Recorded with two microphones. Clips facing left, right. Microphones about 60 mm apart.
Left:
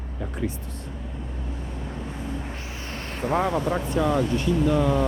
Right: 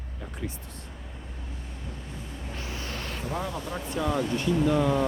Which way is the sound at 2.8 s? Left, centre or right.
Left.